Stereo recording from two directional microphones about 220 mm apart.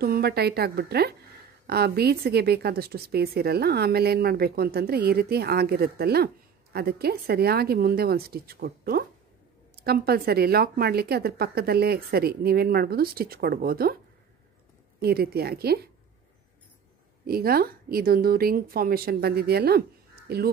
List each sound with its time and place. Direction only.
0.0 s speech: 45° right (ahead or behind)
15.0 s speech: 45° right (ahead or behind)
17.3 s speech: 45° right (ahead or behind)